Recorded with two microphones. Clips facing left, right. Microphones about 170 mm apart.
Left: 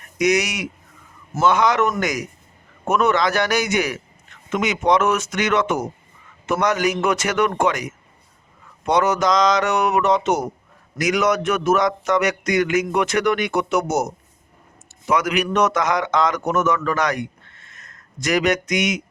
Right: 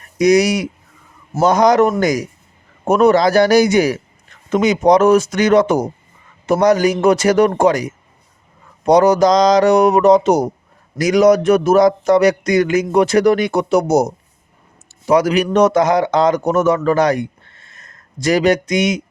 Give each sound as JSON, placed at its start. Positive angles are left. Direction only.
{"t": 0.2, "sound": "a man's voice", "side_deg": -35}